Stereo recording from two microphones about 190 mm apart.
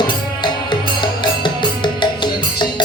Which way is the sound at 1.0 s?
25° left (ahead or behind).